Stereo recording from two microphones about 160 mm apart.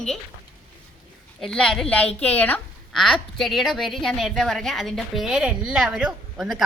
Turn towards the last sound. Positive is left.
turn(degrees=0)  # may be behind; listen again after turning